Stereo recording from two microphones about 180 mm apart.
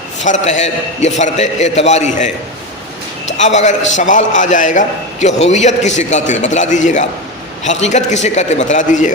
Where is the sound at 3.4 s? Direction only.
40° left (ahead or behind).